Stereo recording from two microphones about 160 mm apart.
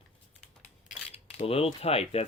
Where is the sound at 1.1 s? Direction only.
40° left (ahead or behind).